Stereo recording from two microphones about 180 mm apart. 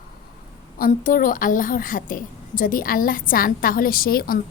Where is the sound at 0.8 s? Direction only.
50° left (ahead or behind).